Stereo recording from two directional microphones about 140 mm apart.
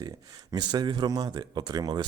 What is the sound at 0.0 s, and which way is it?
Speech, 30° right (ahead or behind).